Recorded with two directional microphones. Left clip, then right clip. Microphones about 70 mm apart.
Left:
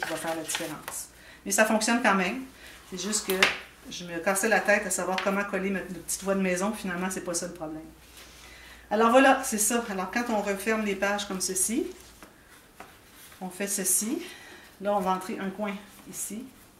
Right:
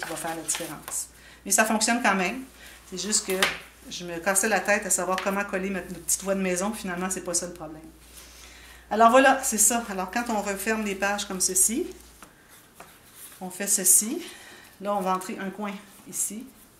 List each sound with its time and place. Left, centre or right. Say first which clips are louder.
0.0 s chopping: left 1 dB; centre
1.4 s speech: right 1 dB; right
8.8 s speech: right 3 dB; right
13.6 s speech: right 5 dB; right
15.0 s speech: right 1 dB; right